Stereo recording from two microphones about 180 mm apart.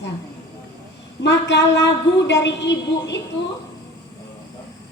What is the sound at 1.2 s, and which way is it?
A woman's voice, 75° left (ahead or behind).